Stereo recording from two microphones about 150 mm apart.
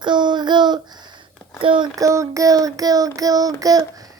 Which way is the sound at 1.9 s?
20° right (ahead or behind).